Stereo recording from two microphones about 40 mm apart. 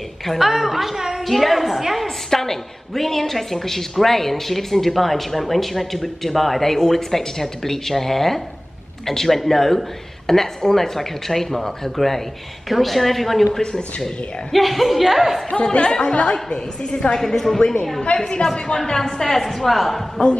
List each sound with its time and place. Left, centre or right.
0.4 s a woman's voice: centre
1.2 s speech: centre
2.0 s a woman's voice: centre
13.6 s a woman's voice: left
14.0 s speech: centre
15.5 s a woman's voice: left; by 20.0 s centre
20.2 s a woman's voice: centre